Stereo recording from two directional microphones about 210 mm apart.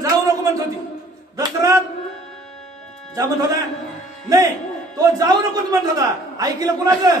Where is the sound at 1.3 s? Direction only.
15° right (ahead or behind).